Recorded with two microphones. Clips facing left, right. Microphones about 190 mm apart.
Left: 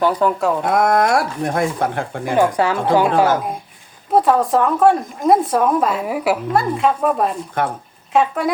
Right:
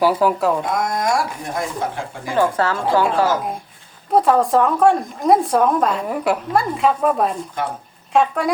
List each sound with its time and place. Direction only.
0.0 s speech: 5° right (ahead or behind)
0.6 s speech: 60° left (ahead or behind)
2.3 s a woman's voice: 15° left (ahead or behind)
4.1 s speech: centre (ahead or behind)
7.6 s speech: 55° left (ahead or behind)
8.1 s speech: centre (ahead or behind)